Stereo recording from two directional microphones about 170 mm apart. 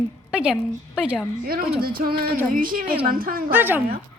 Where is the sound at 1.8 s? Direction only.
60° right (ahead or behind).